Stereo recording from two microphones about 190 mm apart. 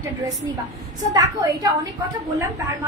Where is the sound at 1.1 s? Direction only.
15° right (ahead or behind).